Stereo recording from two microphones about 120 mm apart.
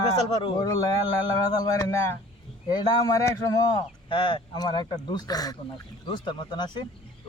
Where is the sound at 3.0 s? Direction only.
30° left (ahead or behind).